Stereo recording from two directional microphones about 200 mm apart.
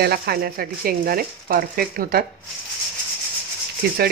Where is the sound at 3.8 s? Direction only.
55° right (ahead or behind).